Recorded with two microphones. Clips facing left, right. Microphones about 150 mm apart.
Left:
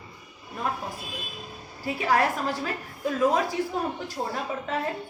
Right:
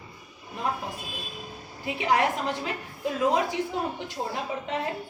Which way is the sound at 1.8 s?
20° right (ahead or behind).